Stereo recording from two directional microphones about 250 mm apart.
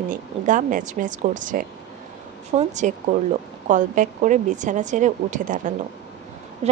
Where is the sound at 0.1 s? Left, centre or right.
Right.